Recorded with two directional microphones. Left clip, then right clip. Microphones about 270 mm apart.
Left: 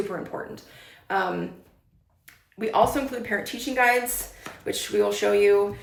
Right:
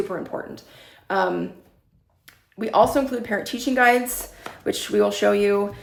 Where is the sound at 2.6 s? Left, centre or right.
Centre.